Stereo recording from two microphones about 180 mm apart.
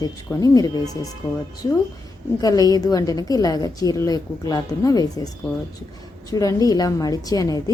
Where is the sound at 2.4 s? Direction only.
20° left (ahead or behind).